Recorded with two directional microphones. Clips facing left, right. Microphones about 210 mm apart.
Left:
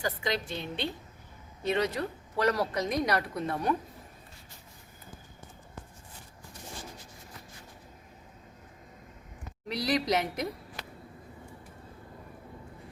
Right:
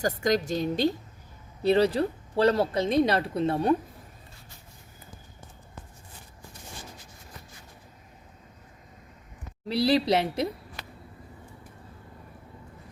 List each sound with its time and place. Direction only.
0.0 s a woman's voice: 45° right (ahead or behind); by 3.8 s 30° right (ahead or behind)
9.6 s speech: 30° right (ahead or behind)